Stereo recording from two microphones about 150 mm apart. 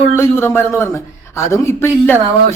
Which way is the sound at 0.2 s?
15° left (ahead or behind).